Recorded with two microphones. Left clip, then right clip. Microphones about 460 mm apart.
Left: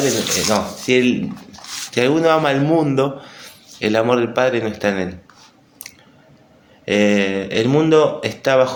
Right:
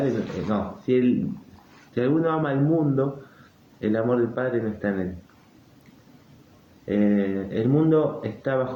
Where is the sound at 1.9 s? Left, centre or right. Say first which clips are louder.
Left 8 dB; right.